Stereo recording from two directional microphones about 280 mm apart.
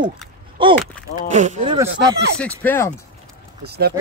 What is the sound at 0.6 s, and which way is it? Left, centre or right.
Speech, centre.